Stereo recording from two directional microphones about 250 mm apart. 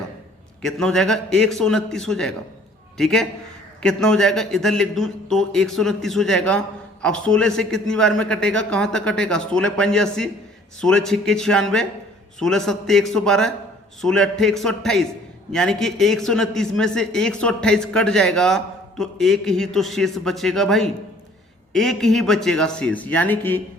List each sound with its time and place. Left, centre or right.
0.6 s speech: centre